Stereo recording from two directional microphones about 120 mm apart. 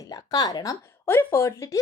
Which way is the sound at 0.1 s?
30° left (ahead or behind).